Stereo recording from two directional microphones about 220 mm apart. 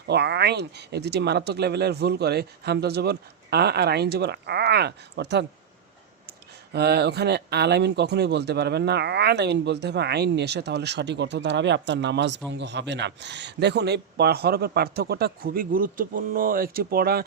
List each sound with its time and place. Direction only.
0.1 s speech: 50° right (ahead or behind)
6.7 s speech: 50° right (ahead or behind)